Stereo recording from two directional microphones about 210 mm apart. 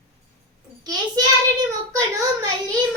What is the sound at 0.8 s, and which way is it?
Speech, 20° right (ahead or behind).